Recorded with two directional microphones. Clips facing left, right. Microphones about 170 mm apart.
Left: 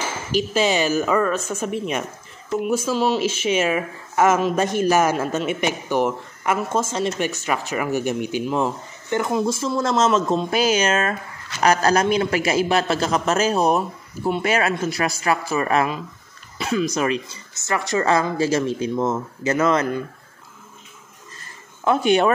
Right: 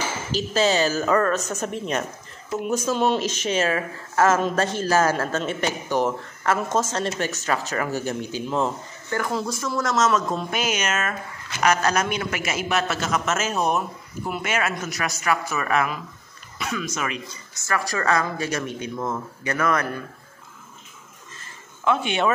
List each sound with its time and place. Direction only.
0.3 s a woman's voice: 10° left (ahead or behind)
21.8 s a man's voice: 40° left (ahead or behind)